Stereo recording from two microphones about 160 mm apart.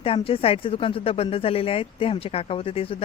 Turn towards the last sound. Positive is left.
turn(degrees=35)  # may be behind; listen again after turning